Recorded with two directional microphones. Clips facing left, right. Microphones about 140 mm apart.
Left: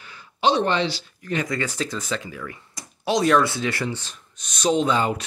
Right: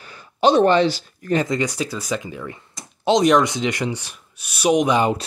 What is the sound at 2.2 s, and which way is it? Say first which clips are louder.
Speech: right 3 dB; 25° right (ahead or behind).